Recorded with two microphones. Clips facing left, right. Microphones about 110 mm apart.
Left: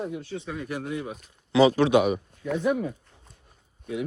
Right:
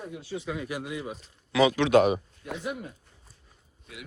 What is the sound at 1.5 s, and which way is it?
Speech, 35° left (ahead or behind).